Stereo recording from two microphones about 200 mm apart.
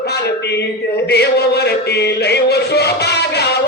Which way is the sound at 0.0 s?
55° left (ahead or behind).